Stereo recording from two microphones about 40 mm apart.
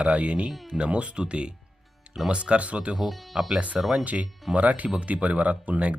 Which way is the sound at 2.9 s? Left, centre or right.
Centre.